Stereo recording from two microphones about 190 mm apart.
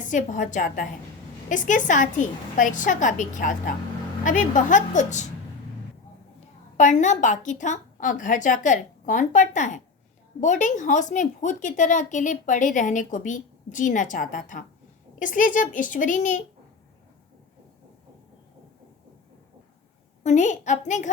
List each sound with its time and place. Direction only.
0.0 s a woman's voice: 40° left (ahead or behind)
6.7 s a woman's voice: 40° left (ahead or behind)
20.2 s a woman's voice: 40° left (ahead or behind)